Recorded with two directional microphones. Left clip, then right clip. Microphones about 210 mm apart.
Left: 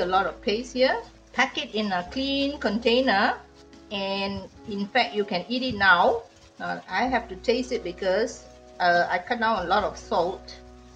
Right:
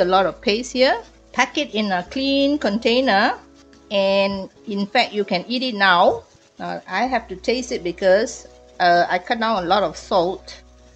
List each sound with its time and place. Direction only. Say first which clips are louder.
0.0 s speech: right 7 dB; 45° right (ahead or behind)